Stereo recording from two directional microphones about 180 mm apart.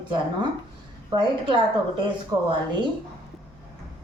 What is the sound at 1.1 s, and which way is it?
Speech, 25° right (ahead or behind).